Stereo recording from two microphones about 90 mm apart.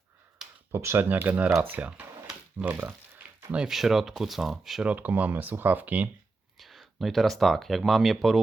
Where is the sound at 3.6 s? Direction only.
5° right (ahead or behind).